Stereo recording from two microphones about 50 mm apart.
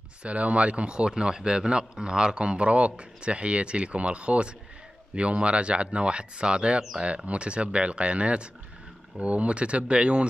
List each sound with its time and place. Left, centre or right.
0.2 s a man's voice: right